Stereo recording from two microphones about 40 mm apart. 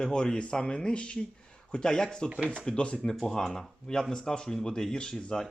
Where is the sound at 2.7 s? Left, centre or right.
Left.